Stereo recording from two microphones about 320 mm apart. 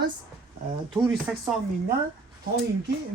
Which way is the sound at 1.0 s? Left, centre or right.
Centre.